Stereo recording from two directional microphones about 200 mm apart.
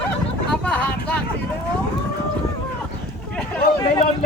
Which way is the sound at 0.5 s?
5° left (ahead or behind).